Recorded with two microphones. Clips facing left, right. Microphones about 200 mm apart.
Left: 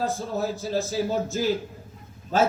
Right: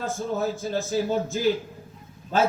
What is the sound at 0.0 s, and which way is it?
Speech, 35° left (ahead or behind).